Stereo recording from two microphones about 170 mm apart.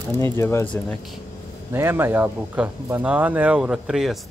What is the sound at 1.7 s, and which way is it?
Speech, 15° right (ahead or behind).